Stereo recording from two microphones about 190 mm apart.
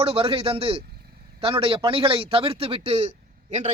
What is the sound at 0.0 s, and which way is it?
Speech, 30° right (ahead or behind).